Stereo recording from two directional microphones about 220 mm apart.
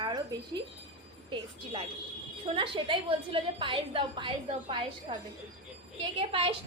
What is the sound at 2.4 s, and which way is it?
A woman's voice, 25° right (ahead or behind).